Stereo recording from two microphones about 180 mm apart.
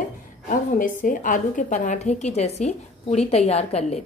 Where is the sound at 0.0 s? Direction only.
45° left (ahead or behind).